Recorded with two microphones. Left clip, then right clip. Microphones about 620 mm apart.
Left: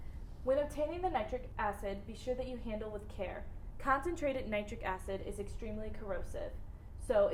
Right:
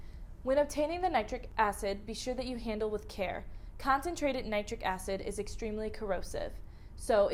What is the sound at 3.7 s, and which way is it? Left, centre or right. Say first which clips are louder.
A woman's voice: right 3 dB; right.